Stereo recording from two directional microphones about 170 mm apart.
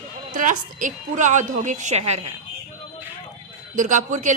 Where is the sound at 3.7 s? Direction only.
45° right (ahead or behind).